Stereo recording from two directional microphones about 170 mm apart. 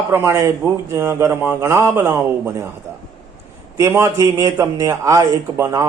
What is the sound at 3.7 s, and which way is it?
A man's voice, 15° right (ahead or behind).